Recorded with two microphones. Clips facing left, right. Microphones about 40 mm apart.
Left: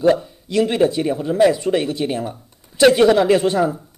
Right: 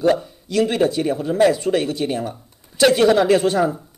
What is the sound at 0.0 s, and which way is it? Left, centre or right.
Speech, centre.